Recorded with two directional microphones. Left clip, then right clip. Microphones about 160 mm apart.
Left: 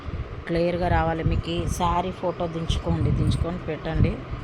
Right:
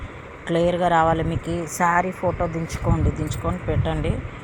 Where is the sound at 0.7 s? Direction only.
10° right (ahead or behind).